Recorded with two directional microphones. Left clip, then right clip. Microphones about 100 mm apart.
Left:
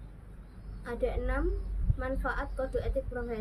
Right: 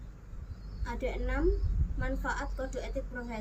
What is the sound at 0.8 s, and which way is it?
A woman's voice, 20° left (ahead or behind).